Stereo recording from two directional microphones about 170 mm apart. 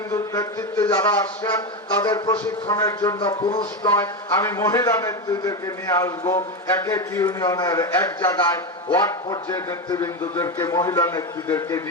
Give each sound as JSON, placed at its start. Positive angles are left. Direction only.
{"t": 0.1, "sound": "a man's voice", "side_deg": 15}
{"t": 3.8, "sound": "a man's voice", "side_deg": 15}